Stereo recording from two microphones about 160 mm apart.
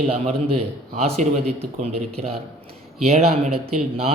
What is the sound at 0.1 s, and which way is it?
A man's voice, 40° right (ahead or behind).